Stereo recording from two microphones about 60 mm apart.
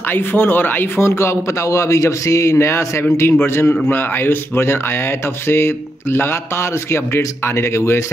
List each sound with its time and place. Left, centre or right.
0.1 s speech: left
1.0 s a man's voice: left
2.6 s a man's voice: left